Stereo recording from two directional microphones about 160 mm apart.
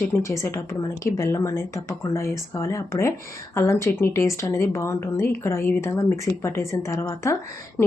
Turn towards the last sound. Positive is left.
turn(degrees=15)  # may be behind; listen again after turning